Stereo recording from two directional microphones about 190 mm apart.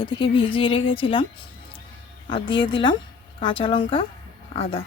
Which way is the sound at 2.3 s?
25° left (ahead or behind).